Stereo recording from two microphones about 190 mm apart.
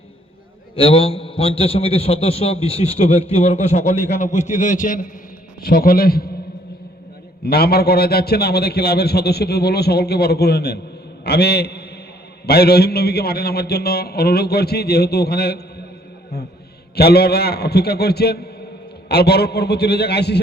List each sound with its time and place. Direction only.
0.8 s a man's voice: 30° left (ahead or behind); by 6.3 s 55° left (ahead or behind)
7.4 s a man's voice: 55° left (ahead or behind)
16.9 s a man's voice: 55° left (ahead or behind)